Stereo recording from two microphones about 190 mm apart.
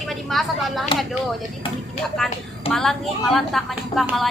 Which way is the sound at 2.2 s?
Centre (ahead or behind).